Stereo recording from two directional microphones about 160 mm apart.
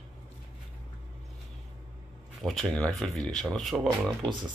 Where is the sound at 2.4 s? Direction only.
5° left (ahead or behind).